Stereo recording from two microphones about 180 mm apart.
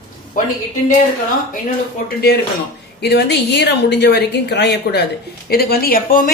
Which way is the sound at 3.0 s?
70° left (ahead or behind).